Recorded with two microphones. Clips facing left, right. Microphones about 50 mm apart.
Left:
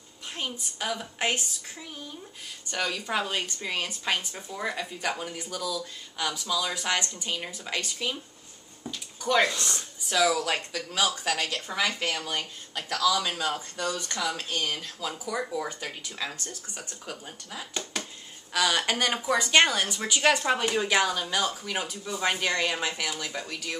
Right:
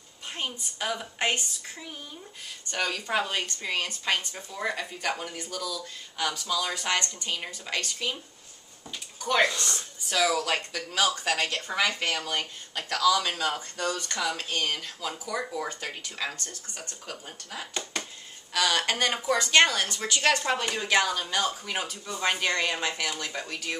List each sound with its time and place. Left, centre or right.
0.3 s a woman's voice: centre
4.6 s a woman's voice: centre
9.3 s a woman's voice: centre
11.3 s speech: right
12.0 s a woman's voice: centre
13.1 s a woman's voice: centre
14.4 s a woman's voice: centre
14.8 s a woman's voice: centre
16.3 s a woman's voice: centre